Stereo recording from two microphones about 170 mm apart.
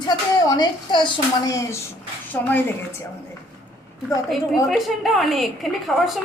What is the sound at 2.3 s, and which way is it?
Speech, 10° left (ahead or behind).